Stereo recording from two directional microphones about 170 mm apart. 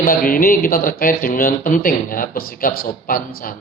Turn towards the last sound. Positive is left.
turn(degrees=55)  # may be behind; listen again after turning